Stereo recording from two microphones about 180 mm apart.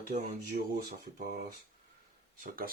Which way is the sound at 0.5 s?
60° right (ahead or behind).